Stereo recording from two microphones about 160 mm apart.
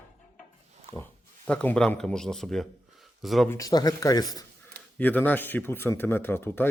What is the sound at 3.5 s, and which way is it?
Speech, 20° left (ahead or behind).